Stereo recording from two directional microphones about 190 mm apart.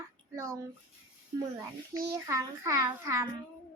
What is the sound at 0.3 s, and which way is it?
Speech, 15° right (ahead or behind).